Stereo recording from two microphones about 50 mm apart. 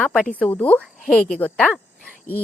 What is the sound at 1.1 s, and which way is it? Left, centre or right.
Speech, centre.